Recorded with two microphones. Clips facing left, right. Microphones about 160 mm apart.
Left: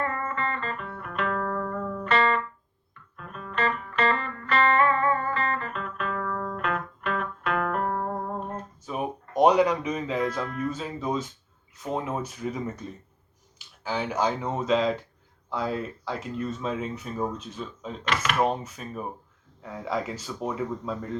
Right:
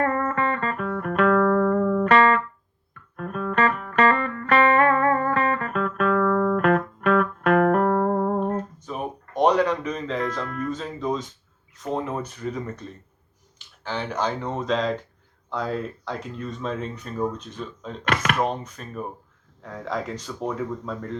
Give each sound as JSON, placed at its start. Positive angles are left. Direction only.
{"t": 0.0, "sound": "music", "side_deg": -50}
{"t": 8.9, "sound": "music", "side_deg": 5}
{"t": 10.7, "sound": "speech", "side_deg": 5}
{"t": 18.0, "sound": "speech", "side_deg": -50}
{"t": 18.3, "sound": "speech", "side_deg": 5}